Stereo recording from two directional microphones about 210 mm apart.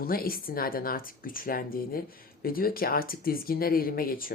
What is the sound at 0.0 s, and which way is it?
Speech, 45° left (ahead or behind).